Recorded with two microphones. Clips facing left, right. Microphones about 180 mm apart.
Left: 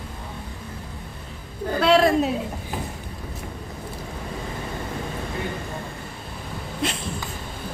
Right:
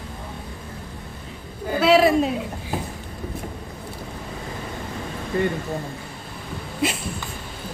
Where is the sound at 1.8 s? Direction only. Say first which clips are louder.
Right 2 dB; 5° right (ahead or behind).